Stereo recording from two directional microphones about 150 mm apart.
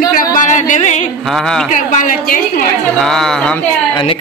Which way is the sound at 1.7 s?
60° left (ahead or behind).